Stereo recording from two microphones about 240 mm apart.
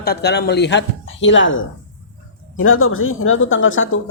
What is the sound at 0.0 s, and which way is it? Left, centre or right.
Speech, left.